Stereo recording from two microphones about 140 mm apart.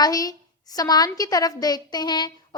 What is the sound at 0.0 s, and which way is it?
A woman's voice, 25° left (ahead or behind).